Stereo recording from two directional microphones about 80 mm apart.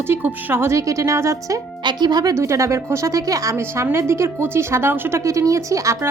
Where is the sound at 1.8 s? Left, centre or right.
Right.